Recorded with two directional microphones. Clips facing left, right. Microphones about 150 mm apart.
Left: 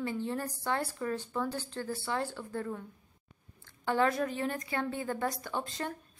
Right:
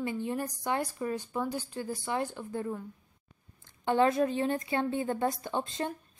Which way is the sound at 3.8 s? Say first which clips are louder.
Right 4 dB; 20° right (ahead or behind).